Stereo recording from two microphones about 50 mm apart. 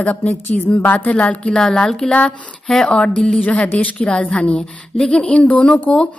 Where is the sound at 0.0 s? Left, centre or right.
Left.